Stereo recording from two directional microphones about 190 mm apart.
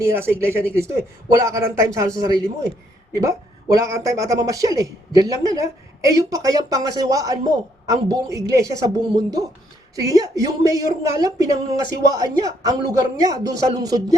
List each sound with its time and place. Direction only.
0.0 s a man's voice: 15° right (ahead or behind)
9.9 s a man's voice: 20° right (ahead or behind)